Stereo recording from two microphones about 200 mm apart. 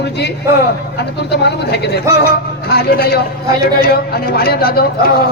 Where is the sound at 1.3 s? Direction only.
55° left (ahead or behind).